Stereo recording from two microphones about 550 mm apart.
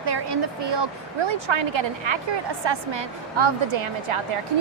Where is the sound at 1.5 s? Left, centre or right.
Right.